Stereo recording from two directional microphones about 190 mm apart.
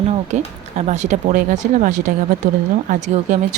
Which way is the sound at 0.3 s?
35° right (ahead or behind).